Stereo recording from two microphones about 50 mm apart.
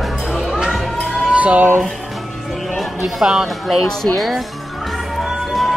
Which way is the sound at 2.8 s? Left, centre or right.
Centre.